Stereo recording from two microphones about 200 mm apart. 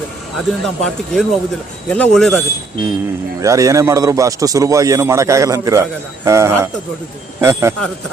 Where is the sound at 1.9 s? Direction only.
5° left (ahead or behind).